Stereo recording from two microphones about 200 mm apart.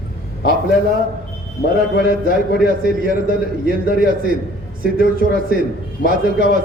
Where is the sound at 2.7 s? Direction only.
45° right (ahead or behind).